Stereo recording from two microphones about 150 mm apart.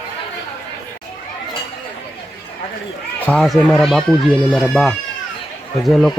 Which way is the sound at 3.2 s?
10° left (ahead or behind).